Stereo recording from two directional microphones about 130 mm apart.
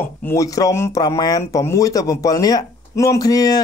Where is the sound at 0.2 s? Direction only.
20° left (ahead or behind).